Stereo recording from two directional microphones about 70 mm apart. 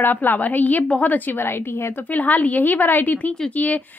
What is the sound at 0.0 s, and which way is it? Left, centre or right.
A woman's voice, left.